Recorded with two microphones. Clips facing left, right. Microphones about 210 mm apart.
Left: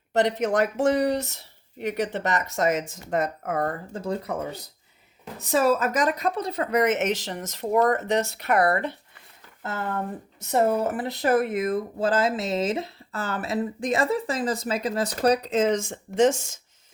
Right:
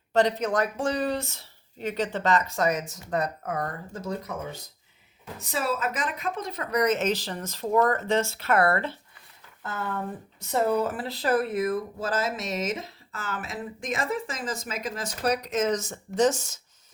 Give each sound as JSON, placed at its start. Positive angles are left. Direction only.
{"t": 0.1, "sound": "speech", "side_deg": 25}
{"t": 5.5, "sound": "speech", "side_deg": 45}